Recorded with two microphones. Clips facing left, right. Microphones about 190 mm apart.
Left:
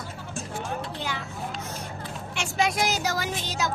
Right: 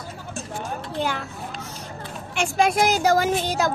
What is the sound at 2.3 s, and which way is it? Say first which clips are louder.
A woman's voice: right 6 dB; 55° right (ahead or behind).